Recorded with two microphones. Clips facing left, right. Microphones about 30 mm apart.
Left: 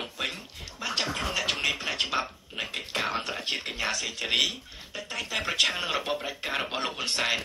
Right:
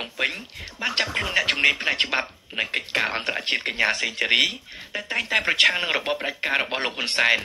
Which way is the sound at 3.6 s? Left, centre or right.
Right.